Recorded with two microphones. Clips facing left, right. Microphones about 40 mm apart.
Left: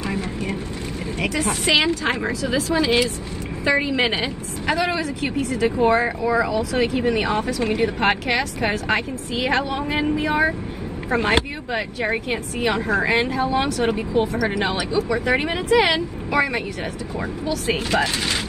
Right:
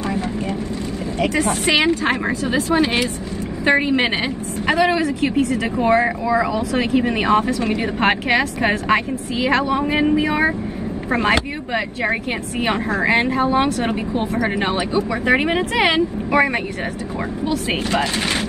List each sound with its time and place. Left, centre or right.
1.3 s a woman's voice: right
4.7 s speech: right
9.5 s a woman's voice: right
17.5 s a woman's voice: right